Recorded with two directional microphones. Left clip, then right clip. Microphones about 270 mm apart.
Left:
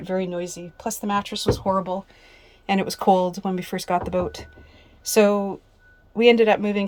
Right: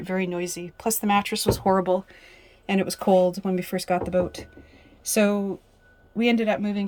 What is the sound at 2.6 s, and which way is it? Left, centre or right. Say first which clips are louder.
Speech: left 4 dB; centre.